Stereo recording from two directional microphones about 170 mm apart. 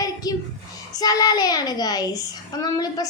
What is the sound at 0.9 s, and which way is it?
A child's voice, 20° left (ahead or behind).